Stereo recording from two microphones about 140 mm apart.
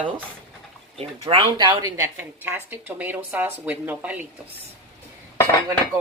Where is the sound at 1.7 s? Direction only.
15° right (ahead or behind).